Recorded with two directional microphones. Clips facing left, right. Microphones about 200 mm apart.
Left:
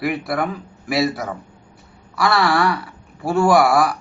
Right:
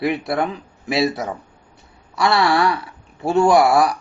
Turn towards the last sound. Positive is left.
turn(degrees=-25)  # may be behind; listen again after turning